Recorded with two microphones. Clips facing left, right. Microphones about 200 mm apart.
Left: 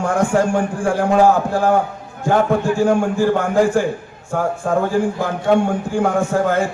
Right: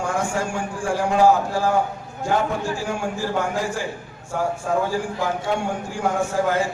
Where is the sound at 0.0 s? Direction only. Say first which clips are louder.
Left 8 dB; 55° left (ahead or behind).